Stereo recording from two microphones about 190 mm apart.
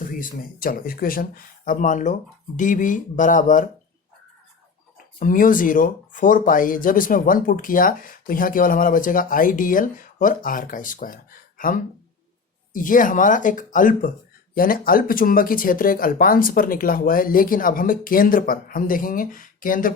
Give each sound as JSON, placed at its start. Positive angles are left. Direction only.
{"t": 0.0, "sound": "speech", "side_deg": 45}
{"t": 5.2, "sound": "speech", "side_deg": 45}